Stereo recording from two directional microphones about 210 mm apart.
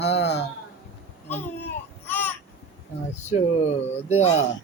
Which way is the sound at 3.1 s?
35° left (ahead or behind).